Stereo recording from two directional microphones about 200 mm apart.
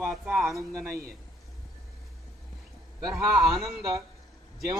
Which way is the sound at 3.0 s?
15° right (ahead or behind).